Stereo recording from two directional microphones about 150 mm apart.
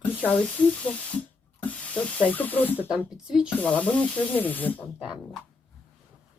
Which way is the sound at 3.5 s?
10° left (ahead or behind).